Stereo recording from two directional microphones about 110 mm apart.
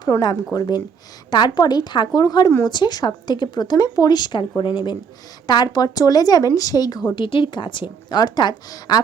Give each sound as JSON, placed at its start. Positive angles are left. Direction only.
{"t": 0.0, "sound": "speech", "side_deg": 40}
{"t": 5.5, "sound": "speech", "side_deg": 40}
{"t": 7.3, "sound": "a woman's voice", "side_deg": 50}